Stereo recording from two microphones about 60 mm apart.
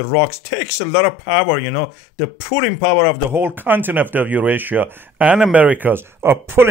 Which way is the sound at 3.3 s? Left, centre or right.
Right.